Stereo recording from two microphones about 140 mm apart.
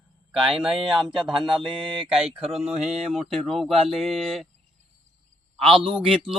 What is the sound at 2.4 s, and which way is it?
Mantra, 50° right (ahead or behind).